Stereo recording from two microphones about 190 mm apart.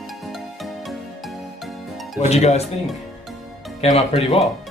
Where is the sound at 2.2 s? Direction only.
35° left (ahead or behind).